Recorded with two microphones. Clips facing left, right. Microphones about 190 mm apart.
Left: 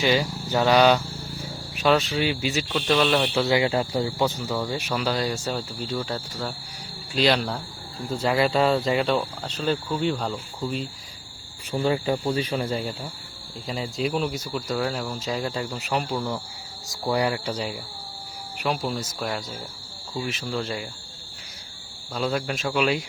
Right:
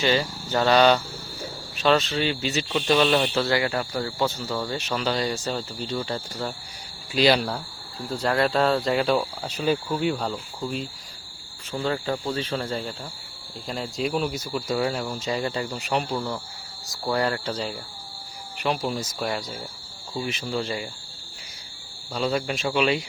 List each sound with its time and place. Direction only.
0.0 s speech: 10° left (ahead or behind)
2.6 s speech: 5° right (ahead or behind)
3.3 s speech: 15° left (ahead or behind); by 10.8 s centre (ahead or behind)
11.7 s speech: 15° left (ahead or behind)
16.9 s speech: 15° left (ahead or behind); by 20.8 s centre (ahead or behind)
22.1 s speech: centre (ahead or behind)